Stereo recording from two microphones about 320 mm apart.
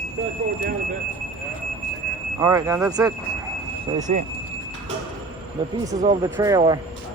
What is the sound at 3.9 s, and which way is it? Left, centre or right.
Speech, right.